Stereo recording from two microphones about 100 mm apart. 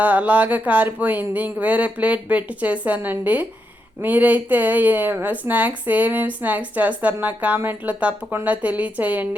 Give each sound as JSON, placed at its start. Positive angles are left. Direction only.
{"t": 0.0, "sound": "speech", "side_deg": -15}